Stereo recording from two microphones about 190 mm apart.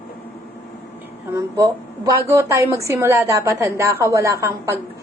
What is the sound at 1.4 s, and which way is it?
A woman's voice, 15° right (ahead or behind).